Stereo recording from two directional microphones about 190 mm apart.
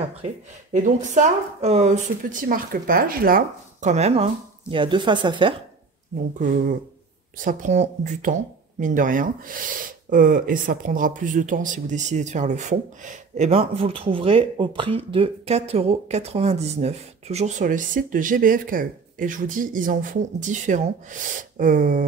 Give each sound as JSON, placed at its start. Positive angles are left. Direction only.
{"t": 0.7, "sound": "speech", "side_deg": -40}
{"t": 7.4, "sound": "speech", "side_deg": -40}